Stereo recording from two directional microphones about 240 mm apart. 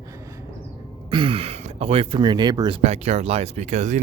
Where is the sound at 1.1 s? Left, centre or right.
Right.